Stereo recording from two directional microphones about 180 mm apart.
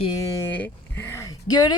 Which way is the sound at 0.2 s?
15° left (ahead or behind).